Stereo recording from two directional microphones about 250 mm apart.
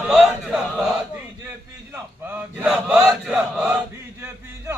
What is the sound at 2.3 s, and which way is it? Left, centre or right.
Chant, centre.